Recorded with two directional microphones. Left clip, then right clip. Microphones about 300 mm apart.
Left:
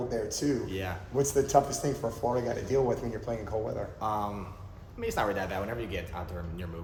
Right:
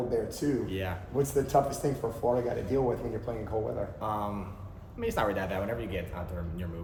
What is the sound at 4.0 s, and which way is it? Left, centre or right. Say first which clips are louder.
Speech: left 4 dB; centre.